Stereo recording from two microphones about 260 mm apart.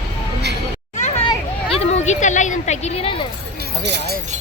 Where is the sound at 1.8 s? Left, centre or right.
Left.